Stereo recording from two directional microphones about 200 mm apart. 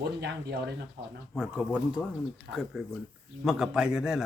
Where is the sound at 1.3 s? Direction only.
5° right (ahead or behind).